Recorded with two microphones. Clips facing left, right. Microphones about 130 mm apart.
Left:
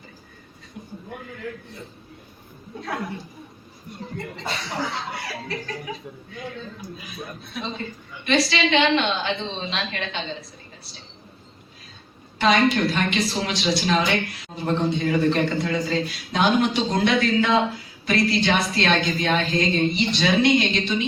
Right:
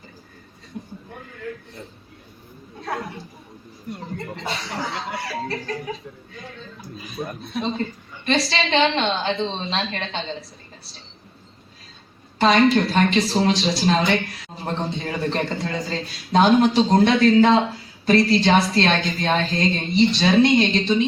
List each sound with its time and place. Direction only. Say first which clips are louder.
5.4 s a woman's voice: right 4 dB; 35° right (ahead or behind)
7.2 s a man's voice: right 7 dB; 50° right (ahead or behind)
8.2 s a woman's voice: left 1 dB; 35° right (ahead or behind)
12.4 s a woman's voice: right 3 dB; 35° right (ahead or behind)